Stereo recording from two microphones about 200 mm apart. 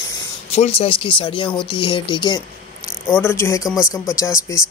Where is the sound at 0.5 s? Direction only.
30° left (ahead or behind).